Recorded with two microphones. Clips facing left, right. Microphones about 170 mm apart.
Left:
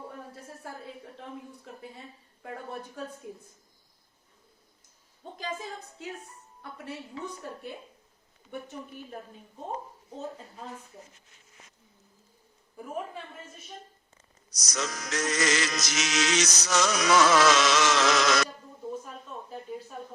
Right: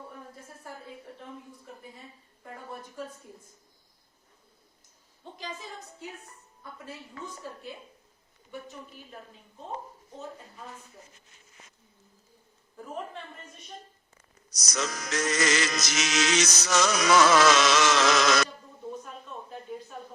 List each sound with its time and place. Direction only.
7.4 s speech: 55° left (ahead or behind)
12.8 s a man's voice: 10° left (ahead or behind)
14.7 s music: 60° right (ahead or behind); by 18.4 s 90° right